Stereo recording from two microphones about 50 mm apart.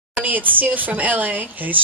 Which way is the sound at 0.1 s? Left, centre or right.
Right.